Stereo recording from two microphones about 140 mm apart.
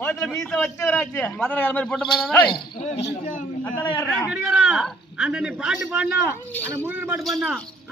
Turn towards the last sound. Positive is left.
turn(degrees=-5)  # may be behind; listen again after turning